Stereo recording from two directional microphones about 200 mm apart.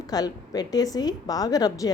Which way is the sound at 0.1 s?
20° left (ahead or behind).